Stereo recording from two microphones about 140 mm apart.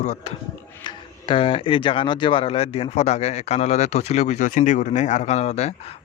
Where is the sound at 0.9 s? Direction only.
40° left (ahead or behind).